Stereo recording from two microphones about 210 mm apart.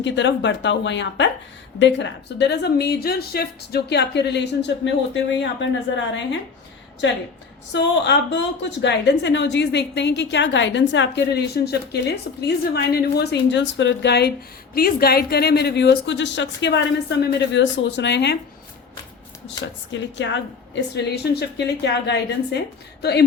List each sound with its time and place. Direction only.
0.0 s a woman's voice: 60° left (ahead or behind)
7.0 s a woman's voice: 60° left (ahead or behind)
19.6 s a woman's voice: 60° left (ahead or behind)